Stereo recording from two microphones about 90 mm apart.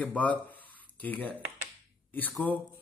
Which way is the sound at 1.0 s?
20° left (ahead or behind).